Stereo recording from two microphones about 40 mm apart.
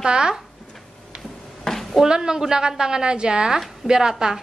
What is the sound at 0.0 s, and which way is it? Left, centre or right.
Speech, right.